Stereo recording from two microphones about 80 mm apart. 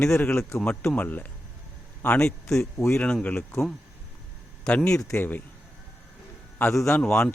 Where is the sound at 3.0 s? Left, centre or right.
Centre.